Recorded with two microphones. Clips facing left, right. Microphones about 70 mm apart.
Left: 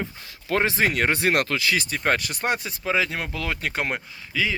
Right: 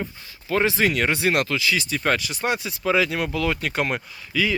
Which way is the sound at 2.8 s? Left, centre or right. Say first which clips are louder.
Right 4 dB; left.